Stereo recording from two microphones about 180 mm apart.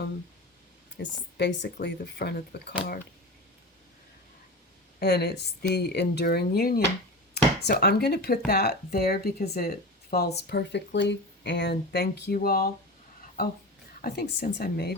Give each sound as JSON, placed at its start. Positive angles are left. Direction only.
{"t": 0.9, "sound": "speech", "side_deg": 70}
{"t": 4.9, "sound": "speech", "side_deg": 65}